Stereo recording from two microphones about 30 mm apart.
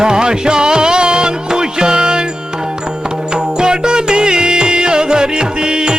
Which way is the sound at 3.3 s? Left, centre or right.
Right.